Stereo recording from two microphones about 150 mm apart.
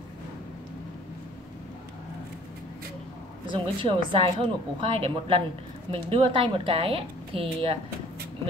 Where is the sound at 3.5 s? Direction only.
35° right (ahead or behind).